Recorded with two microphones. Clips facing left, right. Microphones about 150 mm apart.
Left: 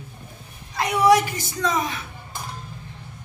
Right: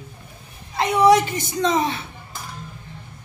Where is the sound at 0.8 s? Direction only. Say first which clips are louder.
Right 2 dB; 25° right (ahead or behind).